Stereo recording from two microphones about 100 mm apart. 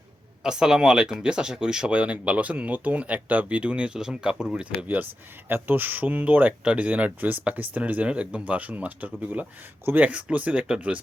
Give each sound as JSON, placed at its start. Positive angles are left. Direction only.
{"t": 0.4, "sound": "speech", "side_deg": -5}